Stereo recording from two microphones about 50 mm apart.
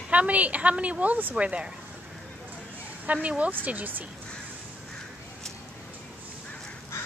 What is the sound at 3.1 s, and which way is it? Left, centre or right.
Speech, right.